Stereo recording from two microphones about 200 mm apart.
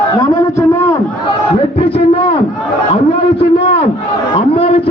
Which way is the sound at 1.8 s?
30° left (ahead or behind).